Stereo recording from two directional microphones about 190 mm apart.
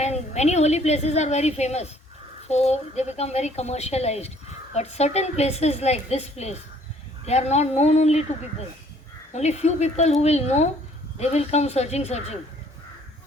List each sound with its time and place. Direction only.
0.0 s a woman's voice: 35° left (ahead or behind)
9.3 s a woman's voice: 35° left (ahead or behind)